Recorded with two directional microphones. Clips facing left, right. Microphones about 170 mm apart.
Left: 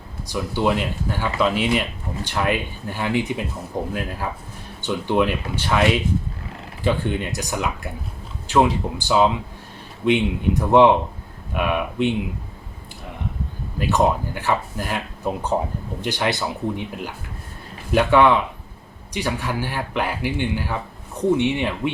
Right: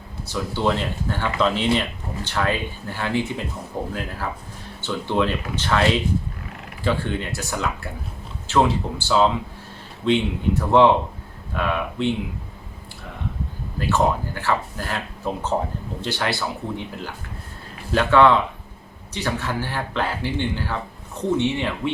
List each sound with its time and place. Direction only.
0.3 s speech: 15° left (ahead or behind)
6.8 s speech: 15° left (ahead or behind)
13.7 s speech: 20° left (ahead or behind)